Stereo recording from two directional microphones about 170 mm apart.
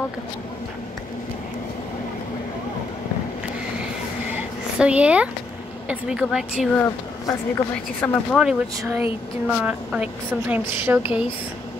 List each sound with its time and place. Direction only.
4.3 s a sound: 5° right (ahead or behind)
5.9 s speech: 5° right (ahead or behind)
7.2 s a woman's voice: 20° left (ahead or behind)
8.4 s a woman's voice: 5° right (ahead or behind)